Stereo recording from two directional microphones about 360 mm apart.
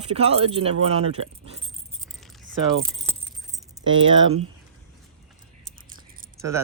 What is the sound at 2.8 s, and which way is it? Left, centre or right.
Keys jangling, centre.